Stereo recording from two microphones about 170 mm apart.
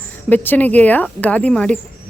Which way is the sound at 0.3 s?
10° left (ahead or behind).